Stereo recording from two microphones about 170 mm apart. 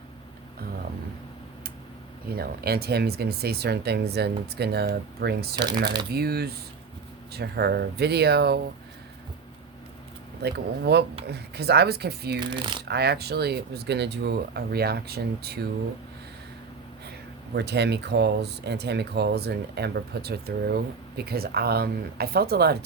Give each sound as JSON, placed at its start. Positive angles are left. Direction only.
{"t": 2.3, "sound": "speech", "side_deg": -65}
{"t": 10.4, "sound": "speech", "side_deg": -75}
{"t": 12.4, "sound": "speech", "side_deg": -25}
{"t": 12.8, "sound": "speech", "side_deg": -75}
{"t": 17.5, "sound": "speech", "side_deg": -80}